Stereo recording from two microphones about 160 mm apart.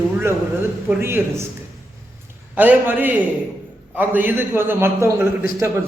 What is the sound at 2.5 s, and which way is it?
A man's voice, 10° right (ahead or behind).